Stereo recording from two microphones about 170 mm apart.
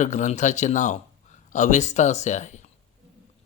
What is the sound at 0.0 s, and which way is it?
Speech, 45° left (ahead or behind).